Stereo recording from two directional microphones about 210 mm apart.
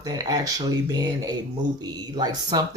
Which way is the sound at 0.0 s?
15° right (ahead or behind).